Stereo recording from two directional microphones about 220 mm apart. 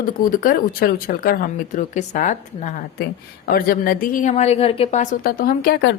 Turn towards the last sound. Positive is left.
turn(degrees=40)  # may be behind; listen again after turning